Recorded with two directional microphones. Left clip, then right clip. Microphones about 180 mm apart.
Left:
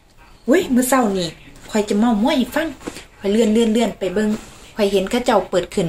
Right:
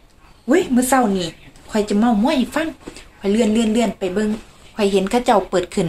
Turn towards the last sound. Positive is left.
turn(degrees=-15)  # may be behind; listen again after turning